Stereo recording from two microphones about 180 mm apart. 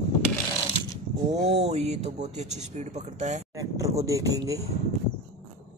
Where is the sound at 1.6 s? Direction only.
35° right (ahead or behind).